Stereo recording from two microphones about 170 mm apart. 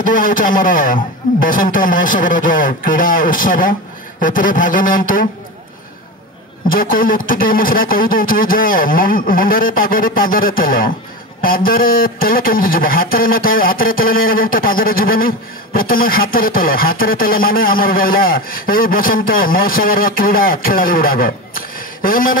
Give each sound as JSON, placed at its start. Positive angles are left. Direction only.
{"t": 0.0, "sound": "speech", "side_deg": 55}
{"t": 6.7, "sound": "speech", "side_deg": 55}